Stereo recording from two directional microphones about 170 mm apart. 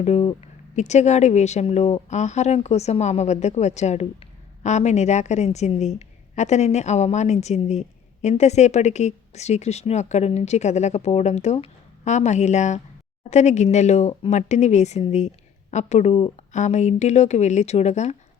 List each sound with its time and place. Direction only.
0.0 s a woman's voice: 40° left (ahead or behind)